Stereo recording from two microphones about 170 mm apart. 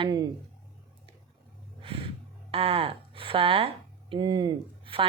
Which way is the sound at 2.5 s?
35° right (ahead or behind).